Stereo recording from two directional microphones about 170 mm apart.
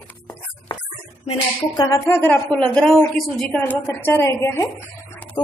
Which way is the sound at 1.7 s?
20° left (ahead or behind).